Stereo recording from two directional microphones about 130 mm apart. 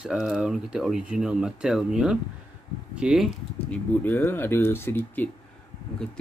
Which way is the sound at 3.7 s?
15° left (ahead or behind).